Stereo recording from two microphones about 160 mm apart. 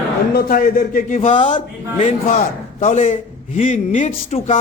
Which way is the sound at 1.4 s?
35° left (ahead or behind).